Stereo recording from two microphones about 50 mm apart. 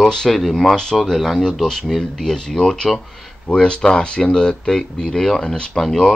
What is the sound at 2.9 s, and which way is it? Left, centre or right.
Speech, centre.